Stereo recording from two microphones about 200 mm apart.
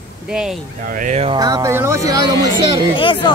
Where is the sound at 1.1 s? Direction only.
25° right (ahead or behind).